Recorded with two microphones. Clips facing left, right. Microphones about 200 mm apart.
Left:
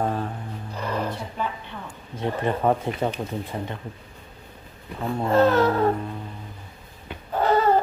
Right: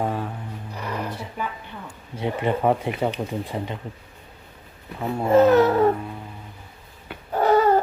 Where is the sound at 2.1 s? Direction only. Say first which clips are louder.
Right 1 dB; 15° right (ahead or behind).